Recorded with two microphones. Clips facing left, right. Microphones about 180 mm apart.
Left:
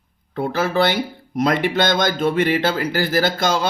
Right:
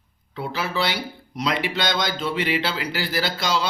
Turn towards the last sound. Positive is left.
turn(degrees=50)  # may be behind; listen again after turning